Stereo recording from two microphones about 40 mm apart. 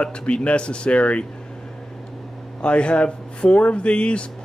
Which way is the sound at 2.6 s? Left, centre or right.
Left.